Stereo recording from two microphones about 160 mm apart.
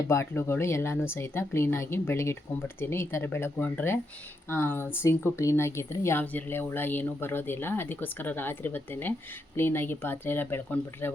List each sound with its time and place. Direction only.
0.1 s speech: 15° left (ahead or behind)